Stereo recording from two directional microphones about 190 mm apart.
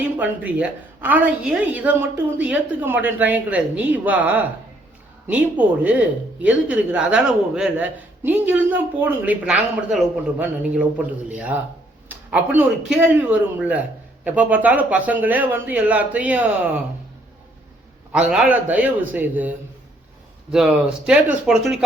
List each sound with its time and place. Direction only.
0.0 s speech: 10° right (ahead or behind)
18.1 s speech: 5° right (ahead or behind)